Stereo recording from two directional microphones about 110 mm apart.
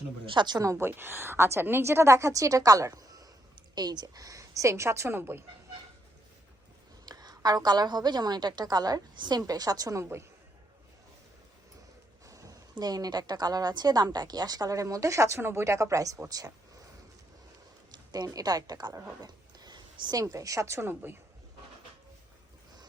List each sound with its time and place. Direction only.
0.3 s a woman's voice: 45° right (ahead or behind)
0.7 s a woman's voice: 20° right (ahead or behind)
7.0 s a woman's voice: 35° right (ahead or behind)
12.2 s a woman's voice: 30° right (ahead or behind)
17.9 s a woman's voice: 35° right (ahead or behind); by 21.2 s 20° right (ahead or behind)